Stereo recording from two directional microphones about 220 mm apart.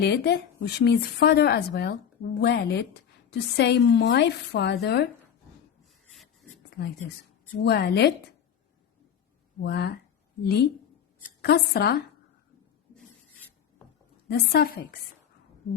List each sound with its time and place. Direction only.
0.0 s speech: 50° left (ahead or behind)
7.6 s speech: 50° left (ahead or behind)
9.6 s speech: 45° left (ahead or behind)
12.9 s filing: 5° left (ahead or behind)
14.3 s speech: 45° left (ahead or behind)